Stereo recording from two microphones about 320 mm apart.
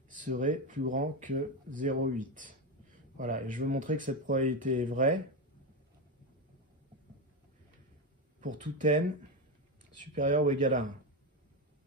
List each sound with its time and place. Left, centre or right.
0.1 s speech: right
8.4 s speech: right